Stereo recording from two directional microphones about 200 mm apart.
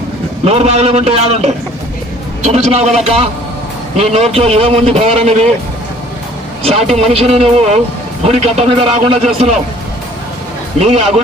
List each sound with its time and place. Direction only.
0.4 s a man's voice: 30° right (ahead or behind)
6.6 s a man's voice: 30° right (ahead or behind)
10.8 s a man's voice: 30° right (ahead or behind)